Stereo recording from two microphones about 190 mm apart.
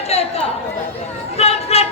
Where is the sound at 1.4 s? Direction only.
35° left (ahead or behind).